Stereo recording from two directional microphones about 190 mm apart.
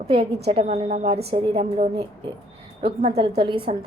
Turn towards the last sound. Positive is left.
turn(degrees=-25)  # may be behind; listen again after turning